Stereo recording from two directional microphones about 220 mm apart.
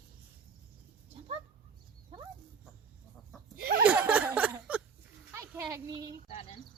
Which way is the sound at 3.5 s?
45° right (ahead or behind).